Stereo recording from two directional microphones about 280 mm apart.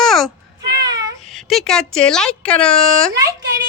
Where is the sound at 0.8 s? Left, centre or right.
Centre.